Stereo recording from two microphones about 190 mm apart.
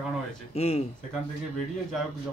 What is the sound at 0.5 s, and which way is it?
Speech, 30° left (ahead or behind).